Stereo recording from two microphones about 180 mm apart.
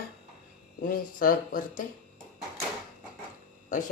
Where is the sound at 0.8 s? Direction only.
50° left (ahead or behind).